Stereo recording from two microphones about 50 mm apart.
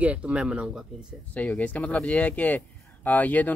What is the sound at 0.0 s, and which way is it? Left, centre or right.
Speech, right.